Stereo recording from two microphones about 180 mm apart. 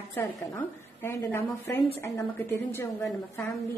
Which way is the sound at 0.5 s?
10° left (ahead or behind).